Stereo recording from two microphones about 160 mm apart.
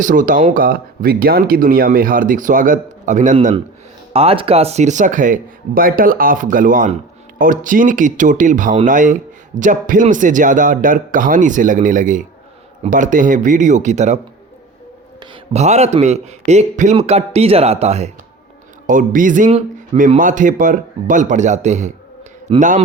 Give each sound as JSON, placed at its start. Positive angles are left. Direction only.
{"t": 0.0, "sound": "speech", "side_deg": -55}
{"t": 4.1, "sound": "a man's voice", "side_deg": -35}
{"t": 15.5, "sound": "a man's voice", "side_deg": -45}
{"t": 18.9, "sound": "a man's voice", "side_deg": -55}
{"t": 22.5, "sound": "a man's voice", "side_deg": -35}